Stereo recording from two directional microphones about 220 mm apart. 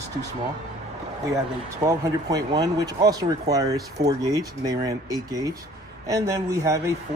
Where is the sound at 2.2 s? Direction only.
15° right (ahead or behind).